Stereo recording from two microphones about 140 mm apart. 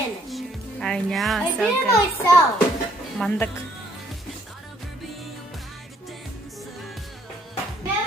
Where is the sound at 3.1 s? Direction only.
5° left (ahead or behind).